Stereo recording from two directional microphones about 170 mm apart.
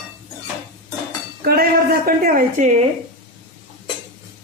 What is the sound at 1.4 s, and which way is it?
A woman's voice, 60° right (ahead or behind).